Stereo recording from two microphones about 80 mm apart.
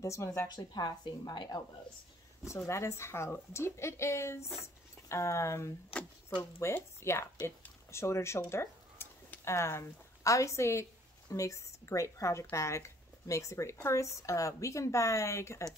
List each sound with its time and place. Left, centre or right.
0.0 s speech: left
0.6 s a woman's voice: left
2.4 s speech: left